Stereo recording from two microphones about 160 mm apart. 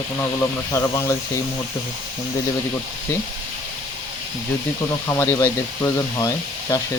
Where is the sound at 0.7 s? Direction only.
15° left (ahead or behind).